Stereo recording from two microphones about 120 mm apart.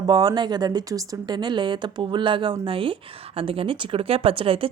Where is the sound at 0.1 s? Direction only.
35° right (ahead or behind).